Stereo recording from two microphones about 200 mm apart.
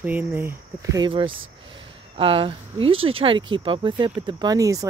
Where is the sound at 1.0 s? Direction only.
25° right (ahead or behind).